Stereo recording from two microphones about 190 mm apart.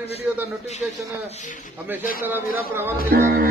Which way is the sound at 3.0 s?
50° right (ahead or behind).